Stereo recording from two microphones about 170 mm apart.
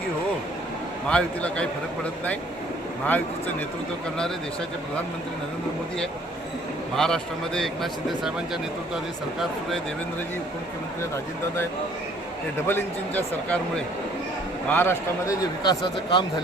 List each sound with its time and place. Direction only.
1.0 s speech: 5° left (ahead or behind)
6.9 s a man's voice: 5° left (ahead or behind)
9.4 s a man's voice: centre (ahead or behind)
12.6 s speech: 10° left (ahead or behind)
14.7 s speech: 15° left (ahead or behind)
15.6 s speech: 25° left (ahead or behind)